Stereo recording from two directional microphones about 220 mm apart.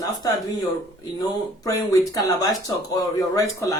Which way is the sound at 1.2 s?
15° left (ahead or behind).